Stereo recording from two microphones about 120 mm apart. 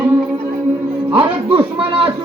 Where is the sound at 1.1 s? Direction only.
50° right (ahead or behind).